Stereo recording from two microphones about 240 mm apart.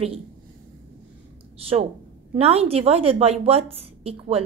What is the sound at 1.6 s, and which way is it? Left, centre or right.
A woman's voice, right.